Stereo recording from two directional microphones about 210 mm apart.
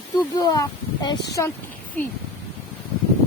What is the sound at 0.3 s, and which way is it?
Speech, 20° left (ahead or behind).